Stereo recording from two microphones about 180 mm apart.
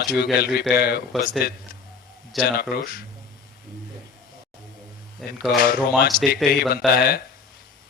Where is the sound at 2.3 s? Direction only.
Centre (ahead or behind).